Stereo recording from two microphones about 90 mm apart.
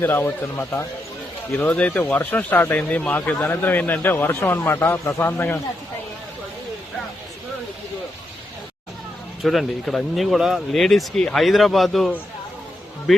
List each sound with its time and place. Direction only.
0.0 s speech: 25° left (ahead or behind)
1.5 s speech: 15° left (ahead or behind)
9.4 s speech: centre (ahead or behind)